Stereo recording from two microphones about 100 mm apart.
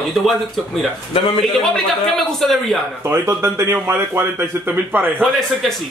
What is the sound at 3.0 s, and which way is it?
Speech, 25° right (ahead or behind).